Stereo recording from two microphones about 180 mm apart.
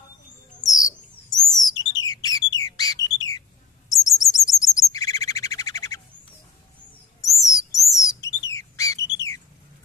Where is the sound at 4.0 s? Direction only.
20° left (ahead or behind).